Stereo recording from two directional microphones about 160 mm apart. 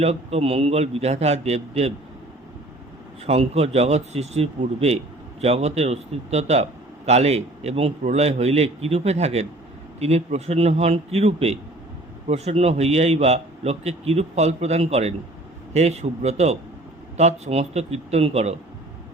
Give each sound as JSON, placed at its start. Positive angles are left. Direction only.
{"t": 0.0, "sound": "a man's voice", "side_deg": -40}
{"t": 3.2, "sound": "a man's voice", "side_deg": -40}